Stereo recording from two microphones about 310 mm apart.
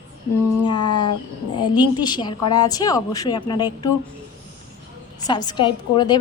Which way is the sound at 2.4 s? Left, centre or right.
Left.